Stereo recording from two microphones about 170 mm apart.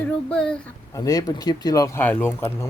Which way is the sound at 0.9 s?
20° left (ahead or behind).